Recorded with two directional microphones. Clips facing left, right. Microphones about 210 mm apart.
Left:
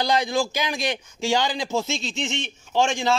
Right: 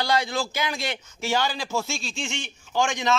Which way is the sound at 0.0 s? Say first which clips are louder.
Left 3 dB; 15° left (ahead or behind).